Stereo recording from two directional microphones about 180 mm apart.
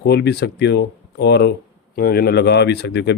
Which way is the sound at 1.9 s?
55° left (ahead or behind).